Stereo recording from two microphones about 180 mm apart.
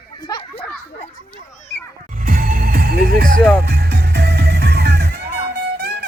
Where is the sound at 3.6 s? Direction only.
60° right (ahead or behind).